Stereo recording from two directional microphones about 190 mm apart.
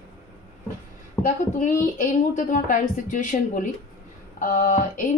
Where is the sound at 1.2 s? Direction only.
10° left (ahead or behind).